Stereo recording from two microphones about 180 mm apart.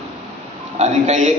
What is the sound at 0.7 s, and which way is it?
Speech, 40° right (ahead or behind).